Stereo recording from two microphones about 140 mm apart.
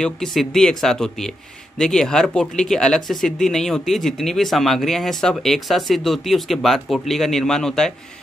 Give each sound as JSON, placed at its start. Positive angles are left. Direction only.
{"t": 0.0, "sound": "speech", "side_deg": 5}